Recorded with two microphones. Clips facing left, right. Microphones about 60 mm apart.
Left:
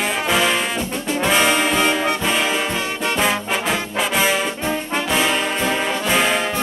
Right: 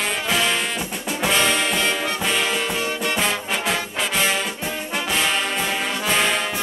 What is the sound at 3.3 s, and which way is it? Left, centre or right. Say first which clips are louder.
Trombone: left 3 dB; centre.